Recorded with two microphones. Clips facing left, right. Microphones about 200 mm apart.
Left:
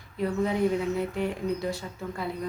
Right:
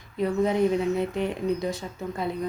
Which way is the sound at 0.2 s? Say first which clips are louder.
Right 3 dB; 20° right (ahead or behind).